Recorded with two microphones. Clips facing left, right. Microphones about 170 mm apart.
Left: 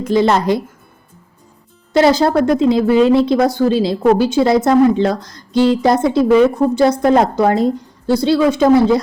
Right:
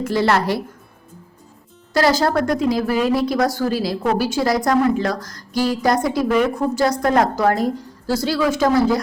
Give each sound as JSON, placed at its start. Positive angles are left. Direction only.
{"t": 0.0, "sound": "a woman's voice", "side_deg": 20}
{"t": 1.9, "sound": "a woman's voice", "side_deg": 25}